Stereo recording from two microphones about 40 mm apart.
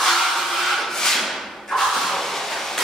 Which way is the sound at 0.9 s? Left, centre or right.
Centre.